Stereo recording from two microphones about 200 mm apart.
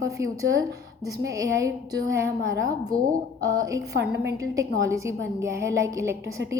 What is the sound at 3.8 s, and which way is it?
Speech, 55° right (ahead or behind).